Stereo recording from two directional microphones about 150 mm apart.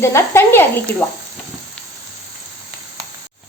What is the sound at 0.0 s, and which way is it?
Speech, 20° left (ahead or behind).